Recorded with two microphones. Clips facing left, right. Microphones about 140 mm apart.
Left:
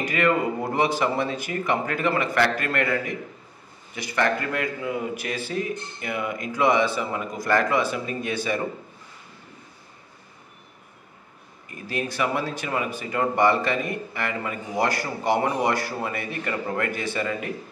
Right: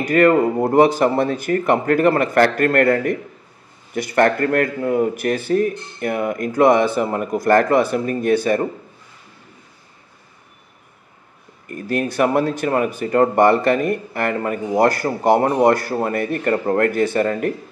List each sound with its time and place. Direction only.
0.1 s speech: 45° right (ahead or behind)
11.7 s speech: 50° right (ahead or behind)